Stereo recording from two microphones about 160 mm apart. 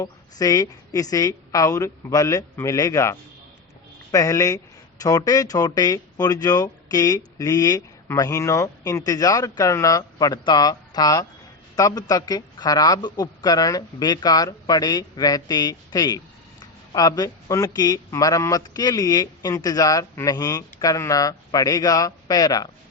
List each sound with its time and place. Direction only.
0.0 s a man's voice: 20° left (ahead or behind)